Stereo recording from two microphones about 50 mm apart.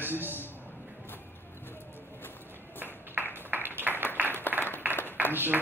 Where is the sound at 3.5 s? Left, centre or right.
Right.